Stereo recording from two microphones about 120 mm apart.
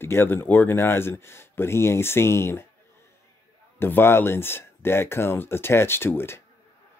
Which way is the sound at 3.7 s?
20° left (ahead or behind).